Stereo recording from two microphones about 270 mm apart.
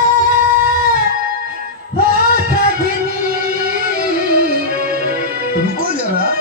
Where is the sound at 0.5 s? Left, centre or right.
Right.